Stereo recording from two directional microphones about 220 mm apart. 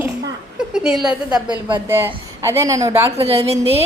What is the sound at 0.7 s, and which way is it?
A woman's voice, 5° right (ahead or behind).